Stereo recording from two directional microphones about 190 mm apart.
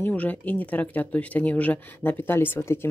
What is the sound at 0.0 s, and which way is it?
Speech, 10° left (ahead or behind).